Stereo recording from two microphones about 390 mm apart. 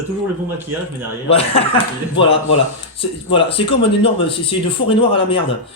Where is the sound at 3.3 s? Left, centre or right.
Centre.